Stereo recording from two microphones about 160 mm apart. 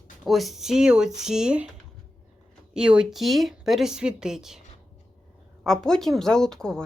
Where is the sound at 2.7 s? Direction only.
5° right (ahead or behind).